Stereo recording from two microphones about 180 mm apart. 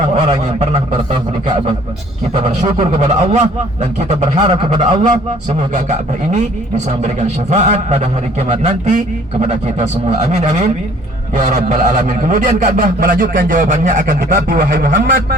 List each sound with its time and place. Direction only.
0.0 s a man's voice: 40° right (ahead or behind)
2.7 s a man's voice: 40° right (ahead or behind); by 15.4 s 60° right (ahead or behind)